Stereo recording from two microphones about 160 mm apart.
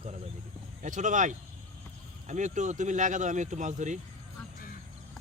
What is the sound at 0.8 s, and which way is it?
Speech, 50° right (ahead or behind).